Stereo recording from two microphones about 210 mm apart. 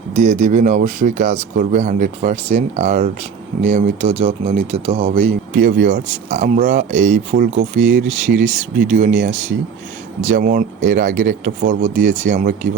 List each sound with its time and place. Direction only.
0.1 s speech: 35° right (ahead or behind)